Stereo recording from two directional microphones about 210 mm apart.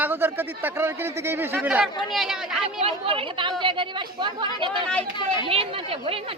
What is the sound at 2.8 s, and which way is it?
Speech, 25° right (ahead or behind).